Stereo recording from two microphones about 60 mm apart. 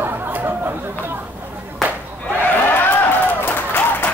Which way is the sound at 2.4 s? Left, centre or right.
Left.